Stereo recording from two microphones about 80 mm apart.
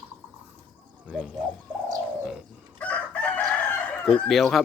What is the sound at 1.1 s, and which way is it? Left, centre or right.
Bird, centre.